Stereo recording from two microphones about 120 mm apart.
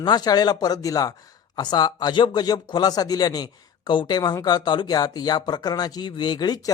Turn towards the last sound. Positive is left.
turn(degrees=35)  # may be behind; listen again after turning